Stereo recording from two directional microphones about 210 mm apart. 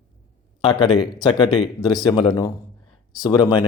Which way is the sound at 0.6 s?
25° left (ahead or behind).